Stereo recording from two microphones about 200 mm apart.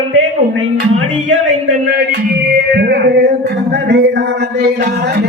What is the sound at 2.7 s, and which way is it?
Music, 55° right (ahead or behind).